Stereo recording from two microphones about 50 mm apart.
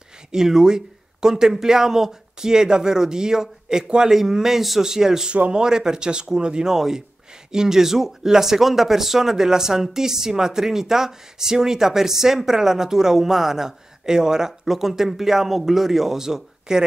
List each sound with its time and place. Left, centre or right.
0.3 s speech: centre
5.3 s speech: right